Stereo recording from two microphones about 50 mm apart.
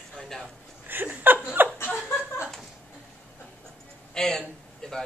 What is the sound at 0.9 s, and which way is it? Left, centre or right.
Speech, right.